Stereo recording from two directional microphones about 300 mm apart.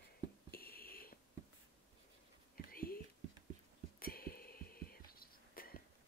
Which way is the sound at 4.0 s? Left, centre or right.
Left.